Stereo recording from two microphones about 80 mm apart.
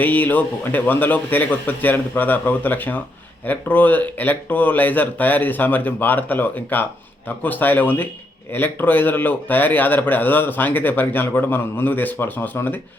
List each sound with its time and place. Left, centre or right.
0.0 s speech: left